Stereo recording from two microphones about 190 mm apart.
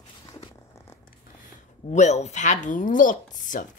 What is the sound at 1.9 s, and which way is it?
Speech, 35° left (ahead or behind).